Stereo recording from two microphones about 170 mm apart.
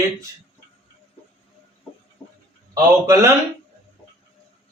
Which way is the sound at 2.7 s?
15° right (ahead or behind).